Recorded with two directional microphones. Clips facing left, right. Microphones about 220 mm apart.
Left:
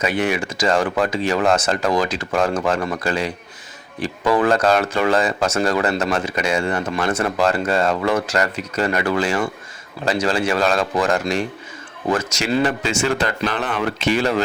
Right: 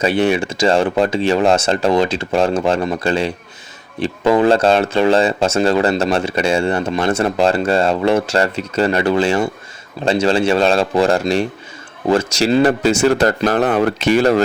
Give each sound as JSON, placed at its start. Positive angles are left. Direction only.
{"t": 0.0, "sound": "speech", "side_deg": -30}